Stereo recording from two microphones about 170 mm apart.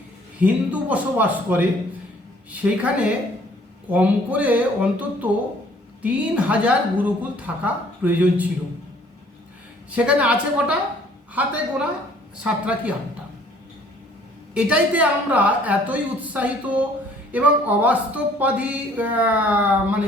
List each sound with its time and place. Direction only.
0.3 s speech: 10° right (ahead or behind)
9.9 s speech: 5° right (ahead or behind)
14.5 s speech: 5° right (ahead or behind)